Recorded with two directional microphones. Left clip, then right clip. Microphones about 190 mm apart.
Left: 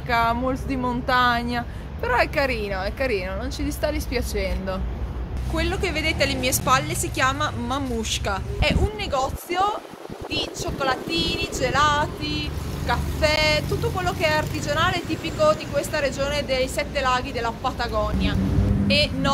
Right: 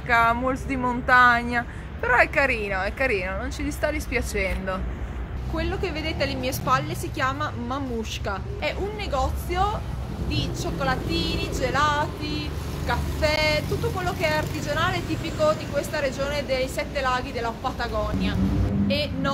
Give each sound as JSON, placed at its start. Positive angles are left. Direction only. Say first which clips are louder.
{"t": 0.1, "sound": "speech", "louder": "right 1 dB", "side_deg": 5}